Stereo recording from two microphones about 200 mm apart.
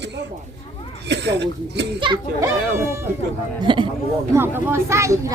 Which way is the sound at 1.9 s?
25° right (ahead or behind).